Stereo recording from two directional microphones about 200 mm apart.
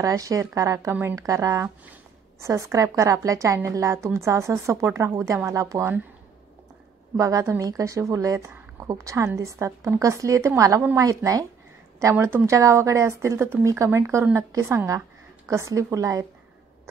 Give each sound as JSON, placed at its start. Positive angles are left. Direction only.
{"t": 0.0, "sound": "a woman's voice", "side_deg": -15}
{"t": 7.2, "sound": "a woman's voice", "side_deg": -15}